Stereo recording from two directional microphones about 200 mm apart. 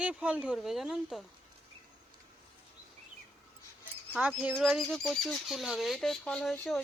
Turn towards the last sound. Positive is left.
turn(degrees=0)  # may be behind; listen again after turning